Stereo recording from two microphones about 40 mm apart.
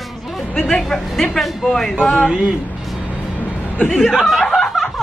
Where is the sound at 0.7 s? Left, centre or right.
Centre.